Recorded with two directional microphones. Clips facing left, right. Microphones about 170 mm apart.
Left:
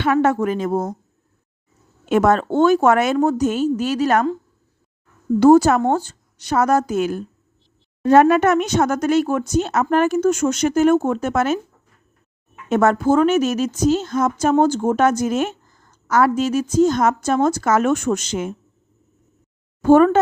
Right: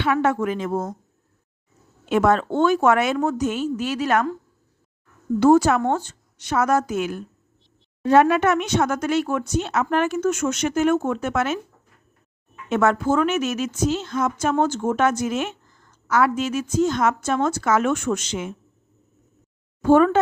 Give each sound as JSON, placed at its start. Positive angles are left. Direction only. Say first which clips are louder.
{"t": 0.0, "sound": "a woman's voice", "louder": "left 4 dB", "side_deg": 45}
{"t": 2.0, "sound": "a woman's voice", "louder": "left 3 dB", "side_deg": 45}
{"t": 5.4, "sound": "a woman's voice", "louder": "left 4 dB", "side_deg": 40}
{"t": 12.6, "sound": "a woman's voice", "louder": "left 4 dB", "side_deg": 40}
{"t": 19.8, "sound": "speech", "louder": "left 3 dB", "side_deg": 45}